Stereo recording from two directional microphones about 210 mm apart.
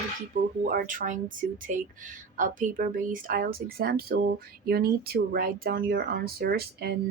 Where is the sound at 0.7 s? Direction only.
40° right (ahead or behind).